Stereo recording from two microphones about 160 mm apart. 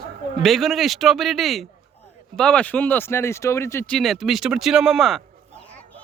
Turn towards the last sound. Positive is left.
turn(degrees=0)  # may be behind; listen again after turning